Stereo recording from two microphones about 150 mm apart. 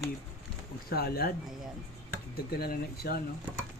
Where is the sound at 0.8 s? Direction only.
90° left.